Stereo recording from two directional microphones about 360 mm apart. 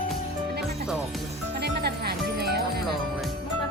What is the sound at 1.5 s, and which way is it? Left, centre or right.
Music, right.